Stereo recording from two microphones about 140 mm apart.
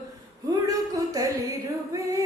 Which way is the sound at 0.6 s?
25° right (ahead or behind).